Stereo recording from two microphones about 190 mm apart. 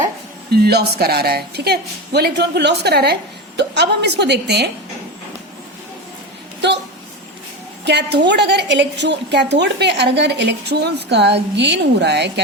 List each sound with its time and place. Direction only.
0.5 s a woman's voice: 55° right (ahead or behind)
7.9 s a woman's voice: 65° right (ahead or behind)